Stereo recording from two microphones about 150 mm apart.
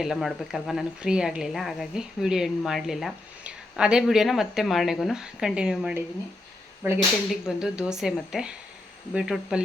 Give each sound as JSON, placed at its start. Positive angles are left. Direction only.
{"t": 0.0, "sound": "speech", "side_deg": 0}
{"t": 6.8, "sound": "speech", "side_deg": -15}
{"t": 7.3, "sound": "speech", "side_deg": -5}